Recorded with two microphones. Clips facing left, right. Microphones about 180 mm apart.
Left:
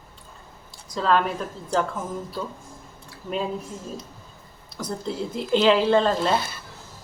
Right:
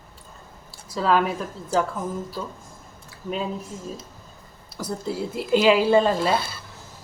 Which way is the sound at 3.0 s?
Centre (ahead or behind).